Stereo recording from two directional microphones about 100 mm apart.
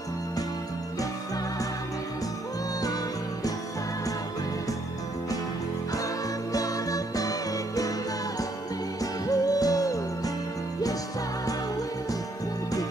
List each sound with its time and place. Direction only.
6.5 s music: 35° left (ahead or behind)
9.0 s music: 35° left (ahead or behind)